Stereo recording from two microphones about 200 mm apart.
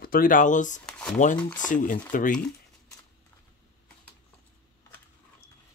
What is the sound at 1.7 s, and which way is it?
Speech, 40° left (ahead or behind).